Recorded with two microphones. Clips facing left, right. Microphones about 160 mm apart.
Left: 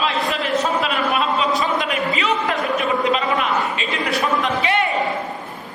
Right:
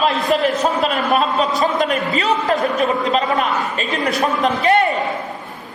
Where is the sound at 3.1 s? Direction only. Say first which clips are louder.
Right 2 dB; 40° right (ahead or behind).